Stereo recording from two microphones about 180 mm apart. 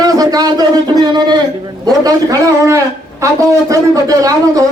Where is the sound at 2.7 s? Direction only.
15° right (ahead or behind).